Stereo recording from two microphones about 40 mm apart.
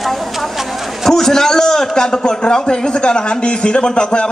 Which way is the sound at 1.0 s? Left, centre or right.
Centre.